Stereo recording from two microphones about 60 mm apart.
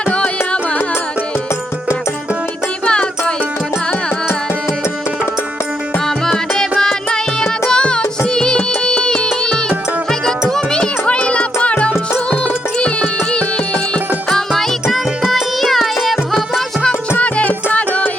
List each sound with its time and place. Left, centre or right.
0.0 s music: left
2.8 s music: centre
6.1 s music: centre
14.3 s music: centre
17.2 s music: left